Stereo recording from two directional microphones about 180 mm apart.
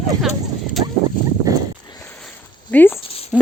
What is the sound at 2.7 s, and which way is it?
Speech, 10° left (ahead or behind).